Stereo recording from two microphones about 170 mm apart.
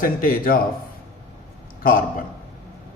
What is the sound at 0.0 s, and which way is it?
Speech, 55° left (ahead or behind).